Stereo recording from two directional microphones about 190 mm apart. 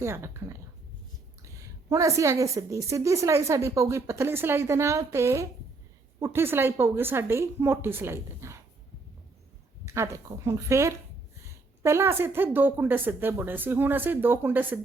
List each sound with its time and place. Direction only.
0.0 s a woman's voice: 15° right (ahead or behind)
9.8 s a woman's voice: 15° right (ahead or behind)